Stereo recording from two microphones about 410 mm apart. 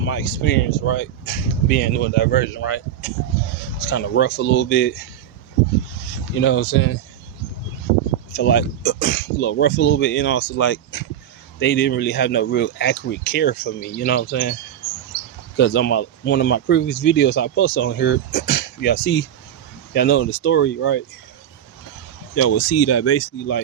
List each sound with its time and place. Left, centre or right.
0.0 s speech: left
6.3 s speech: left
8.4 s speech: left
15.5 s speech: left
22.4 s speech: left